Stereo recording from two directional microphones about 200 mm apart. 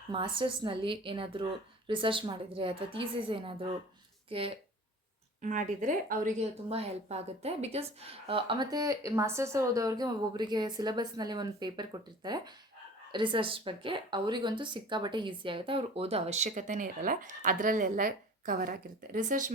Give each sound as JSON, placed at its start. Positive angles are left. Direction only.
{"t": 0.1, "sound": "a woman's voice", "side_deg": -25}
{"t": 5.4, "sound": "a woman's voice", "side_deg": -40}